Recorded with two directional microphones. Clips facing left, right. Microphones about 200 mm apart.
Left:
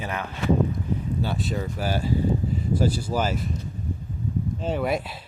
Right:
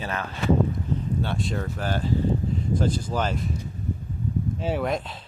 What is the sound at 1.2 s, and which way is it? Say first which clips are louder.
Speech: left 1 dB; centre (ahead or behind).